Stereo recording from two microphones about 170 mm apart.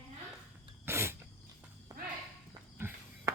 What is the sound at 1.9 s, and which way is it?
Walk, 20° right (ahead or behind).